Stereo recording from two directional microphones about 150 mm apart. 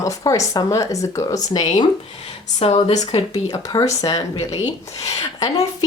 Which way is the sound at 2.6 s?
40° left (ahead or behind).